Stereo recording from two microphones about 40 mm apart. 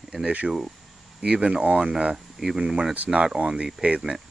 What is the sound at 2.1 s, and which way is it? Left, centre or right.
Speech, centre.